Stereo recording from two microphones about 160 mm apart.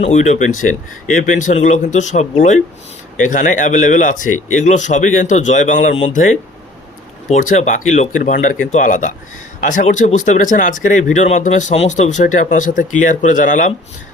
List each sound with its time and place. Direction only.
0.0 s speech: 45° left (ahead or behind)